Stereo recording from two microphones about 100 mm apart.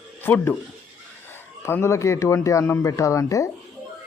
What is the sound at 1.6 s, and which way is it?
Speech, 25° left (ahead or behind).